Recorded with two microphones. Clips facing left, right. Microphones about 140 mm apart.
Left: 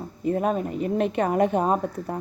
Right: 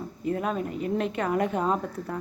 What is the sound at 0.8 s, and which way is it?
Speech, 20° left (ahead or behind).